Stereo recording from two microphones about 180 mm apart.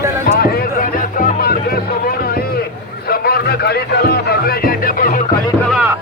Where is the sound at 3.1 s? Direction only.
60° left (ahead or behind).